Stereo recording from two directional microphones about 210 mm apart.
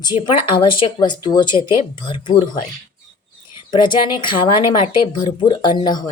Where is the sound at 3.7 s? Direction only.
20° left (ahead or behind).